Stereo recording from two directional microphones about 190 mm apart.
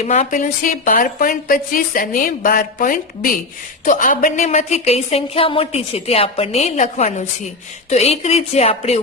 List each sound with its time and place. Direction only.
0.0 s a woman's voice: 35° left (ahead or behind)